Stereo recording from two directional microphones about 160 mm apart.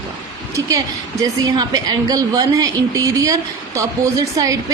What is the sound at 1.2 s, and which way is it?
A woman's voice, 25° right (ahead or behind).